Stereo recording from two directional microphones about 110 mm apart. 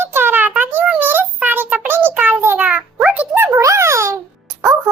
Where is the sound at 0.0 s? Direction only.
20° right (ahead or behind).